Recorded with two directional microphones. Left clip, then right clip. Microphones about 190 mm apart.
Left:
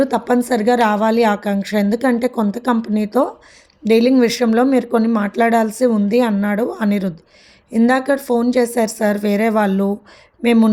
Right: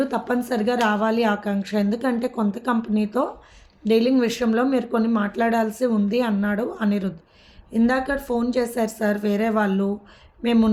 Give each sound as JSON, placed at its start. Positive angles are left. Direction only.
{"t": 0.0, "sound": "speech", "side_deg": 40}